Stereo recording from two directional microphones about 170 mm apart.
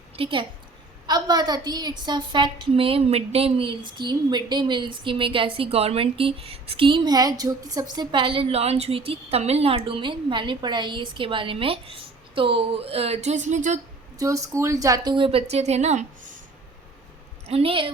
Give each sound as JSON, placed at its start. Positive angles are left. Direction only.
{"t": 0.2, "sound": "a woman's voice", "side_deg": -30}
{"t": 14.2, "sound": "a woman's voice", "side_deg": -20}
{"t": 17.4, "sound": "a woman's voice", "side_deg": -35}